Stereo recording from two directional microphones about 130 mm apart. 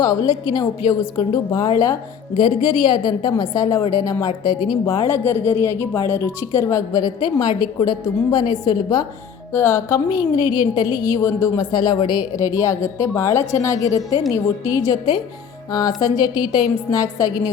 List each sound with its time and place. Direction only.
0.0 s a woman's voice: 30° left (ahead or behind)
9.5 s a woman's voice: 20° left (ahead or behind)